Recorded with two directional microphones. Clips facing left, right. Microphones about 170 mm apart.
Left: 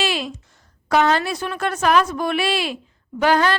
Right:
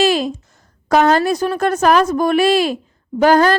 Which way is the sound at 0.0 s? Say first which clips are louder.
Right 9 dB; 40° right (ahead or behind).